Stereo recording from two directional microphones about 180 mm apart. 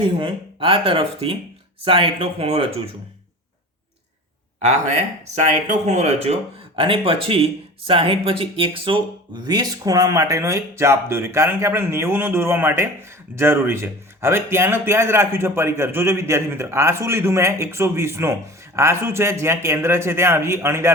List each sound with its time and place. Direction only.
0.2 s speech: 30° right (ahead or behind)
4.6 s speech: 40° right (ahead or behind); by 20.9 s 15° right (ahead or behind)